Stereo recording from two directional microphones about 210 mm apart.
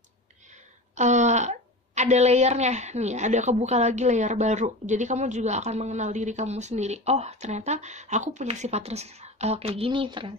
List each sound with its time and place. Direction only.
0.9 s a woman's voice: 35° right (ahead or behind)